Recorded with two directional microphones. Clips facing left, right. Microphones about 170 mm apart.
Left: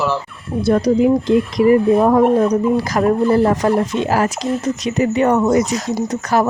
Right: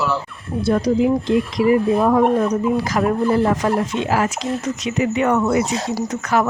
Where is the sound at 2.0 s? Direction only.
35° left (ahead or behind).